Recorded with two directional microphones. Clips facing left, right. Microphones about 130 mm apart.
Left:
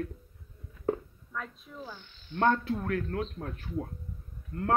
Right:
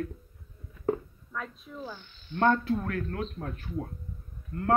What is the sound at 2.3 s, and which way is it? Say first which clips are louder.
Speech: right 2 dB; 20° left (ahead or behind).